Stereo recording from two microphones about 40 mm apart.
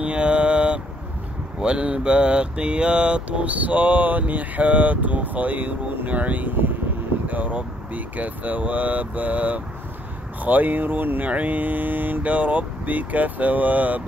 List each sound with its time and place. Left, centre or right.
0.0 s mantra: right
10.4 s speech: right
11.2 s speech: right
12.2 s speech: right